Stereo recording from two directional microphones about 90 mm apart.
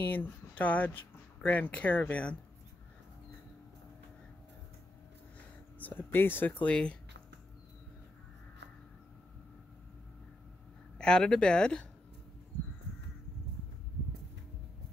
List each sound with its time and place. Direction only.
0.1 s speech: 20° left (ahead or behind)
5.8 s speech: 20° left (ahead or behind)
11.0 s speech: 10° left (ahead or behind)